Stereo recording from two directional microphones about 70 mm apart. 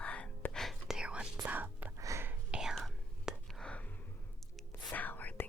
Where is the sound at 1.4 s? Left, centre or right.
Right.